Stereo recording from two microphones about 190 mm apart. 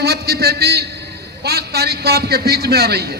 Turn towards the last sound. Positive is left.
turn(degrees=-55)  # may be behind; listen again after turning